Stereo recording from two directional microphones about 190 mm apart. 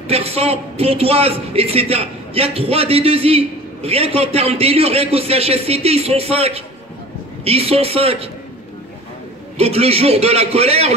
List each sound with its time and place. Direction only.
0.1 s a man's voice: 30° right (ahead or behind)
9.6 s a man's voice: 30° right (ahead or behind)